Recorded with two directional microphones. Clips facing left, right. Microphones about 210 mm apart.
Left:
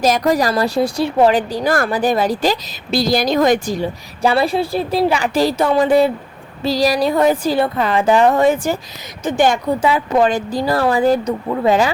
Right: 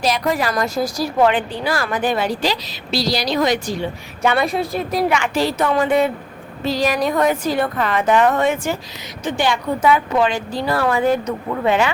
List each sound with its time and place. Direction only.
0.0 s a woman's voice: 40° left (ahead or behind)
4.2 s a woman's voice: 30° left (ahead or behind)
9.2 s a woman's voice: 45° left (ahead or behind)
9.8 s a woman's voice: 35° left (ahead or behind)